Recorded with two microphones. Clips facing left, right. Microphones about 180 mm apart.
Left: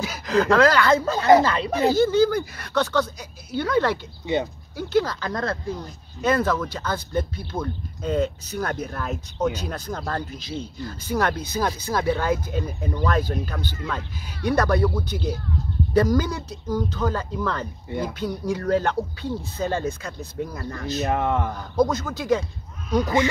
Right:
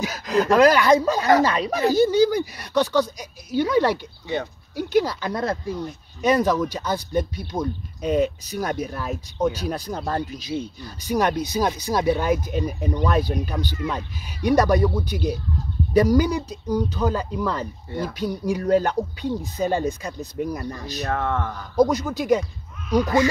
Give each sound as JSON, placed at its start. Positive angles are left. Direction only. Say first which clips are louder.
{"t": 0.0, "sound": "speech", "louder": "even", "side_deg": -15}
{"t": 17.8, "sound": "speech", "louder": "left 2 dB", "side_deg": 15}
{"t": 18.1, "sound": "speech", "louder": "right 2 dB", "side_deg": -15}
{"t": 21.1, "sound": "speech", "louder": "even", "side_deg": 15}
{"t": 21.7, "sound": "speech", "louder": "right 3 dB", "side_deg": -15}